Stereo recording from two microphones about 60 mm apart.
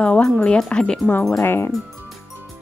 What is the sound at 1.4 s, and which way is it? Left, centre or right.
Speech, left.